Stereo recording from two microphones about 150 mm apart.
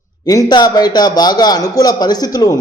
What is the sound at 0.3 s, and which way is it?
A man's voice, 25° left (ahead or behind).